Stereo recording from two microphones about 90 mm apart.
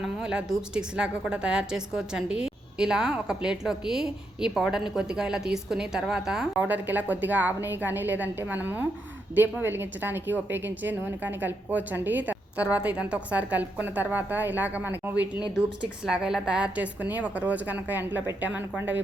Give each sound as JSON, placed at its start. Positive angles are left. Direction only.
{"t": 0.0, "sound": "a woman's voice", "side_deg": -10}
{"t": 6.7, "sound": "a woman's voice", "side_deg": -20}
{"t": 16.0, "sound": "a woman's voice", "side_deg": -5}